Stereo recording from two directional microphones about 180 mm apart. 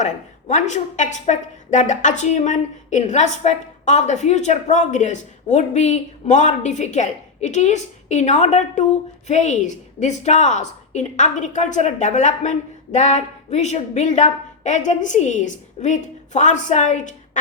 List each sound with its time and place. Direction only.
0.0 s a woman's voice: 40° left (ahead or behind)